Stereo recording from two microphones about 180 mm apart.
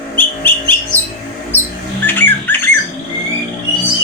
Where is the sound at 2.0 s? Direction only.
10° left (ahead or behind).